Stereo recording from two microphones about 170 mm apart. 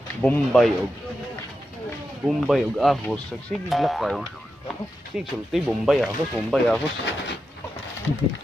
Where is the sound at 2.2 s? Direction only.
Centre (ahead or behind).